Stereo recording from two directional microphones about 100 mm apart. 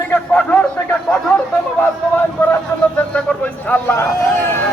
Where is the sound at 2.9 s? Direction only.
10° left (ahead or behind).